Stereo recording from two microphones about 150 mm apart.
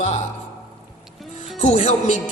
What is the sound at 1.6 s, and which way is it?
Speech, 45° left (ahead or behind).